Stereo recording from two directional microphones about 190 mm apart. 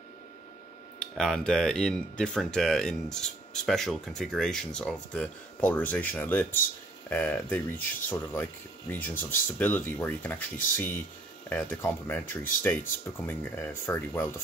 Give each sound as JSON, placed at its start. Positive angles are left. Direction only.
{"t": 0.9, "sound": "speech", "side_deg": 5}